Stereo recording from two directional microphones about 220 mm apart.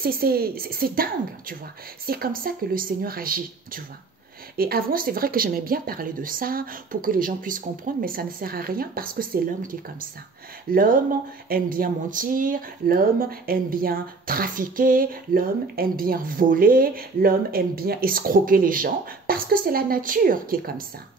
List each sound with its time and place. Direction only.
0.0 s a woman's voice: 45° right (ahead or behind)